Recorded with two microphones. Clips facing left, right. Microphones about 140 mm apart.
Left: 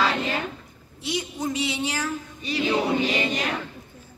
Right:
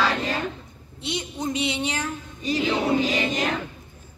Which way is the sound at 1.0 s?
20° right (ahead or behind).